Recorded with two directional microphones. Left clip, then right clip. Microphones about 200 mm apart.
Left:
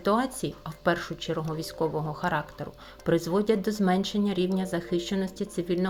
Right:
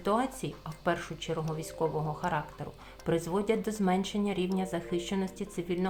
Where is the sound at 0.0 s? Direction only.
20° left (ahead or behind).